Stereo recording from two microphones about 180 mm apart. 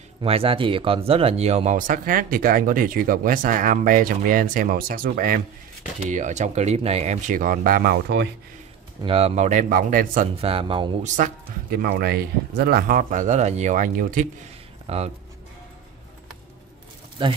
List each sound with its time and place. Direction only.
0.2 s speech: 30° right (ahead or behind); by 8.3 s 65° right (ahead or behind)
9.0 s speech: 35° right (ahead or behind); by 10.2 s 50° right (ahead or behind)
10.2 s speech: 30° right (ahead or behind)
11.1 s speech: 50° right (ahead or behind)
17.2 s speech: 25° right (ahead or behind)